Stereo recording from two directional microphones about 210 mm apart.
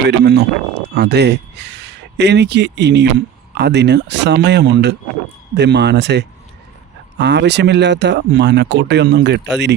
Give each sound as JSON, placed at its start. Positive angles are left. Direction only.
{"t": 0.1, "sound": "speech", "side_deg": -55}